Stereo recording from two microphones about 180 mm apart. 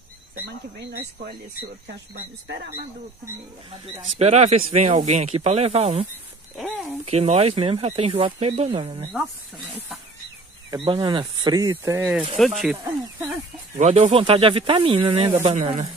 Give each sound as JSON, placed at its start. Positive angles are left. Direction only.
{"t": 4.2, "sound": "speech", "side_deg": -35}
{"t": 6.5, "sound": "speech", "side_deg": 0}
{"t": 7.1, "sound": "speech", "side_deg": -35}
{"t": 10.7, "sound": "speech", "side_deg": -25}
{"t": 12.4, "sound": "speech", "side_deg": 0}
{"t": 13.7, "sound": "speech", "side_deg": -35}
{"t": 15.4, "sound": "speech", "side_deg": -40}